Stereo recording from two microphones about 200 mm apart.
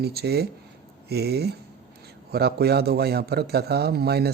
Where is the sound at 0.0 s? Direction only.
55° right (ahead or behind).